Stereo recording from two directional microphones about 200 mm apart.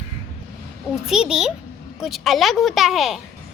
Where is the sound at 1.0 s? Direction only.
Centre (ahead or behind).